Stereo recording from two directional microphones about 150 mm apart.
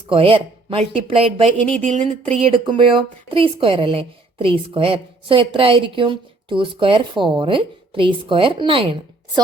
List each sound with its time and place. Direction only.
0.1 s speech: 35° right (ahead or behind)
1.8 s speech: 55° right (ahead or behind); by 9.4 s 35° right (ahead or behind)